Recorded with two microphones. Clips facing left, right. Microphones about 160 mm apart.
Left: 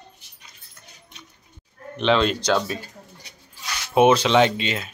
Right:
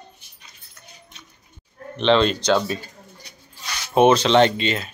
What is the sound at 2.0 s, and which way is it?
Speech, 5° left (ahead or behind).